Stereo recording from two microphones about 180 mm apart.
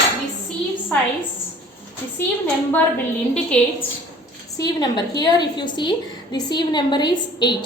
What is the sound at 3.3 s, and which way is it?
Speech, 5° left (ahead or behind).